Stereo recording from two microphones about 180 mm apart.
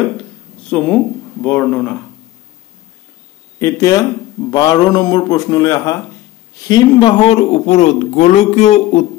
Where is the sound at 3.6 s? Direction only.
20° left (ahead or behind); by 9.0 s 40° left (ahead or behind).